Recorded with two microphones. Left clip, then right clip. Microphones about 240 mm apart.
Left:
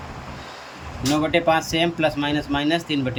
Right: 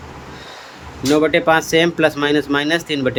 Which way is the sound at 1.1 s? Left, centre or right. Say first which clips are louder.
Right 5 dB; centre.